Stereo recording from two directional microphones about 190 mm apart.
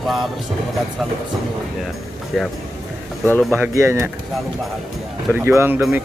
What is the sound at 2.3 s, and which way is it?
Music, centre (ahead or behind).